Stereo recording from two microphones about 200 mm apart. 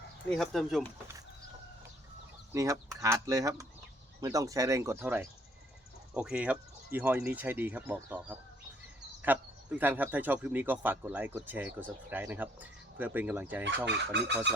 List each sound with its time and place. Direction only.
0.3 s speech: centre (ahead or behind)
2.5 s speech: 15° right (ahead or behind)
13.8 s fowl: 60° right (ahead or behind)